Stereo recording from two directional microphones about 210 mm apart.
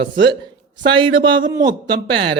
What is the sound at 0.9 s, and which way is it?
Speech, 25° right (ahead or behind).